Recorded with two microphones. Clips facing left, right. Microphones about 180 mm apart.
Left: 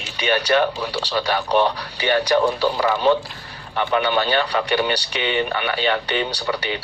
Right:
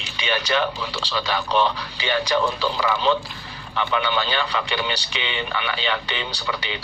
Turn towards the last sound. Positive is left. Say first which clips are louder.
# left 5 dB
turn(degrees=45)  # may be behind; listen again after turning